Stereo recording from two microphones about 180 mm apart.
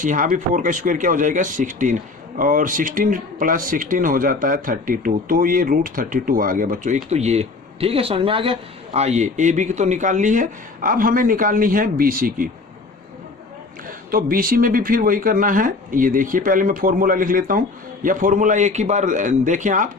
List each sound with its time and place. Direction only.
0.0 s speech: 45° right (ahead or behind)
14.1 s speech: 55° right (ahead or behind)